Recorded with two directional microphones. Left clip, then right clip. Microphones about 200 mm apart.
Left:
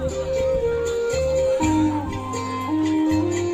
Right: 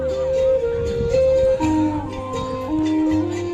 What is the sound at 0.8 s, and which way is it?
Music, 20° left (ahead or behind).